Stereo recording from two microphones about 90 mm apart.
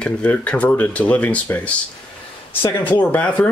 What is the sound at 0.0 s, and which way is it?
Speech, 15° left (ahead or behind).